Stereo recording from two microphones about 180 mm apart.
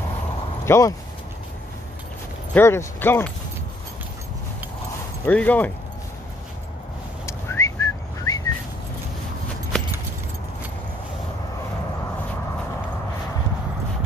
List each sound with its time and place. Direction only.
0.7 s speech: 15° left (ahead or behind)
2.5 s speech: 15° left (ahead or behind)
5.2 s speech: 10° left (ahead or behind)
7.2 s whistling: 15° left (ahead or behind)